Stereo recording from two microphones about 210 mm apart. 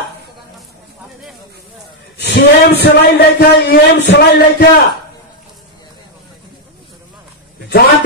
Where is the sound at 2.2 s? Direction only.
55° left (ahead or behind).